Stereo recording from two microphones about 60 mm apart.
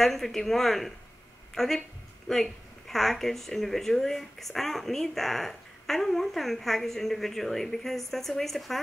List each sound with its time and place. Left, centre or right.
0.0 s speech: centre
2.3 s speech: centre
2.9 s speech: centre